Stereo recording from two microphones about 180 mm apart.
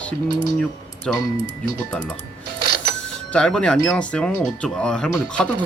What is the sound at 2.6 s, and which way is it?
Music, 65° right (ahead or behind).